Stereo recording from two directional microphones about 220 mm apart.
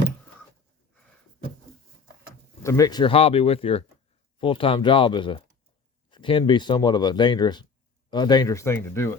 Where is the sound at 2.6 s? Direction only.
15° left (ahead or behind).